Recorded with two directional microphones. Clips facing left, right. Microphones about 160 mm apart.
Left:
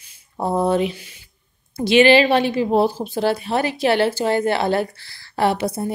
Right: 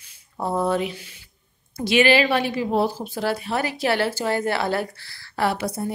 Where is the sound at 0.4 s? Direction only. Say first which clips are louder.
Left 4 dB; 20° left (ahead or behind).